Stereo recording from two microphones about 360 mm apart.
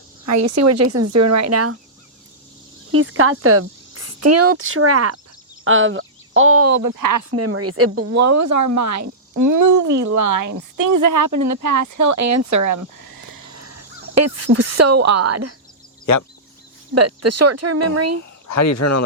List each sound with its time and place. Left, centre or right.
0.3 s speech: right
2.9 s speech: right
7.3 s speech: right
16.9 s speech: right
18.4 s speech: left